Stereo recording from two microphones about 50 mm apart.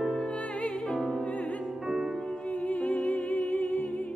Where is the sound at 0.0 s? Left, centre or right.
Centre.